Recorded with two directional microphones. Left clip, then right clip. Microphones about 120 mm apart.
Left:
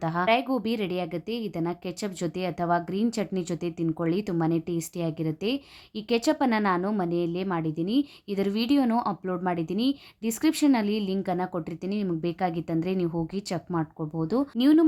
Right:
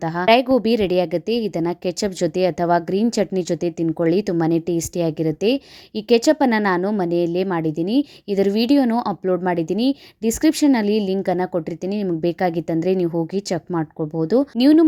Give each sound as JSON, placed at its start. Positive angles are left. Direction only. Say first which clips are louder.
{"t": 0.0, "sound": "a woman's voice", "louder": "right 4 dB", "side_deg": -30}
{"t": 0.3, "sound": "a woman's voice", "louder": "right 12 dB", "side_deg": -50}